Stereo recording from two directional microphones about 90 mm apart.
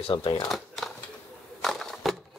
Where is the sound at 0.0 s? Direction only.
75° left (ahead or behind).